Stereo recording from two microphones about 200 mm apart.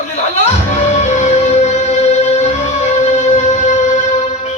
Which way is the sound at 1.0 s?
35° left (ahead or behind).